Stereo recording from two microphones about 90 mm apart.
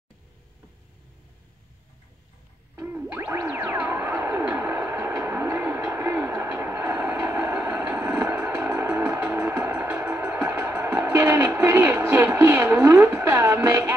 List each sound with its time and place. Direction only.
2.7 s music: 30° right (ahead or behind)
3.9 s vehicle: 25° right (ahead or behind)
8.8 s music: 20° right (ahead or behind)